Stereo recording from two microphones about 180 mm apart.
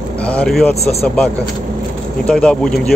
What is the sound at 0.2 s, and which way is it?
Speech, 5° left (ahead or behind).